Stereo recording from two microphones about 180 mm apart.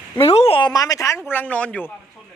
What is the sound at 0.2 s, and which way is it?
Speech, 35° left (ahead or behind).